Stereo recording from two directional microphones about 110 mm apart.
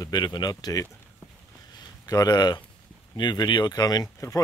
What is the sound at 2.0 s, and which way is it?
Speech, 35° left (ahead or behind).